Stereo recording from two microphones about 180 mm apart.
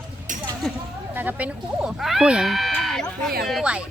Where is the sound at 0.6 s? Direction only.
5° left (ahead or behind).